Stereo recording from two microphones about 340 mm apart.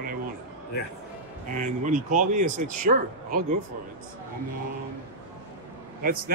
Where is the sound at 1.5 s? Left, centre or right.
Right.